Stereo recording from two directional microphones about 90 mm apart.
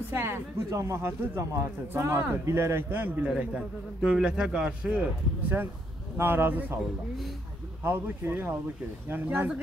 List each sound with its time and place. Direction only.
0.1 s speech: 30° right (ahead or behind)
3.3 s a man's voice: 10° right (ahead or behind)
6.1 s speech: 25° right (ahead or behind)
7.8 s speech: 20° right (ahead or behind)